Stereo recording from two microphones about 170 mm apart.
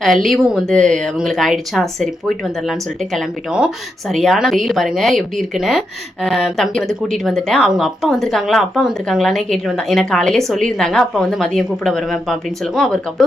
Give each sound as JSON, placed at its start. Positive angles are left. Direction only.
{"t": 0.0, "sound": "speech", "side_deg": 0}